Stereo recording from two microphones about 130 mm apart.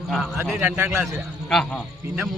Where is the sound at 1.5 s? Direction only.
5° left (ahead or behind).